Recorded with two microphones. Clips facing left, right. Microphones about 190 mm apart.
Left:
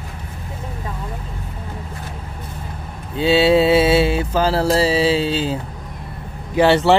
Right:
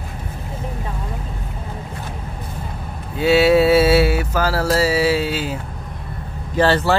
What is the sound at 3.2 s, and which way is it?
Mantra, 25° left (ahead or behind).